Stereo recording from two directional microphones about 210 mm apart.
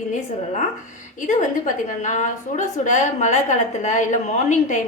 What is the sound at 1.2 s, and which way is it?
A woman's voice, 35° left (ahead or behind).